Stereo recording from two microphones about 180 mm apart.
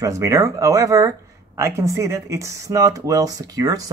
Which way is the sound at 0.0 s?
15° right (ahead or behind).